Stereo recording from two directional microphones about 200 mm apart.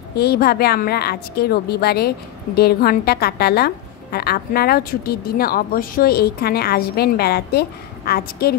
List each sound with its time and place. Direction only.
0.1 s a woman's voice: 50° left (ahead or behind)